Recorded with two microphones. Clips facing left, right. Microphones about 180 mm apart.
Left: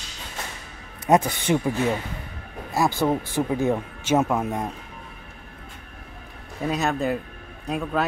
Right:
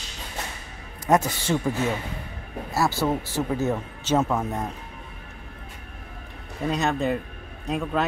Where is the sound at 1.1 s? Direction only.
15° left (ahead or behind).